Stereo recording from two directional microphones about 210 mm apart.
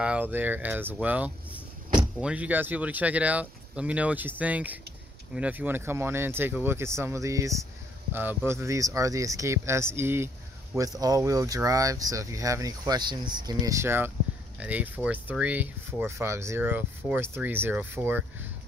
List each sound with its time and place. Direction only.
0.0 s speech: 5° right (ahead or behind)